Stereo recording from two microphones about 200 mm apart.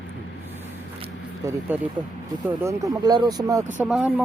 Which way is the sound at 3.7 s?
5° right (ahead or behind).